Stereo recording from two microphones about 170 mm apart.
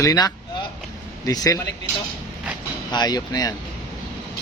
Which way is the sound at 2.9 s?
25° left (ahead or behind).